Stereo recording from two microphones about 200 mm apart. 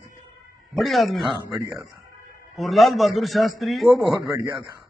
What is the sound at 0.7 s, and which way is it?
Speech, centre (ahead or behind).